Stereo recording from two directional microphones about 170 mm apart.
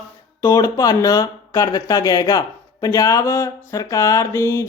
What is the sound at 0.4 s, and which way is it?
Speech, 20° left (ahead or behind).